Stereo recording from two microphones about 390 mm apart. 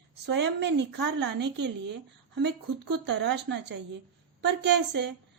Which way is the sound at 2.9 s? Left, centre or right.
Right.